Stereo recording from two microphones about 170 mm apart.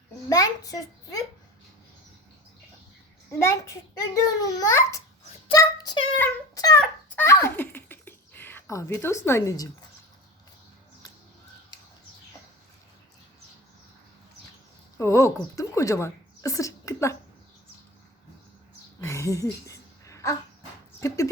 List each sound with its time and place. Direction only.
0.3 s a child's voice: 20° left (ahead or behind)
3.3 s a child's voice: 15° left (ahead or behind)
5.5 s child singing: 25° left (ahead or behind)
6.1 s a child's voice: 10° left (ahead or behind)
6.7 s fowl: 10° left (ahead or behind)
7.4 s a sound: 10° left (ahead or behind)
14.9 s a woman's voice: 15° left (ahead or behind)
18.9 s a sound: 20° left (ahead or behind)